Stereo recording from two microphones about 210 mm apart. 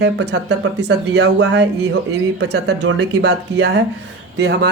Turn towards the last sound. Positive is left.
turn(degrees=-50)  # may be behind; listen again after turning